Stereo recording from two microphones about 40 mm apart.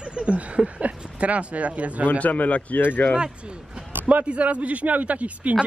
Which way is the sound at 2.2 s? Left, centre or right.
Left.